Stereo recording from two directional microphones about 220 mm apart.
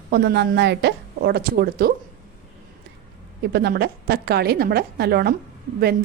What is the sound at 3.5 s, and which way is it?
A woman's voice, 45° right (ahead or behind).